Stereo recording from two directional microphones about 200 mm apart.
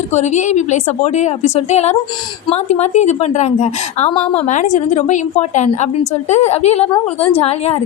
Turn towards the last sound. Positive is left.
turn(degrees=30)  # may be behind; listen again after turning